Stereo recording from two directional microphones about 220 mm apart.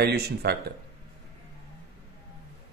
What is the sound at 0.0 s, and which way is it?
Speech, 50° right (ahead or behind).